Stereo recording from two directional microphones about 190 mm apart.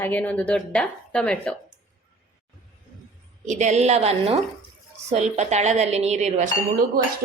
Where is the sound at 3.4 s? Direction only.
40° right (ahead or behind).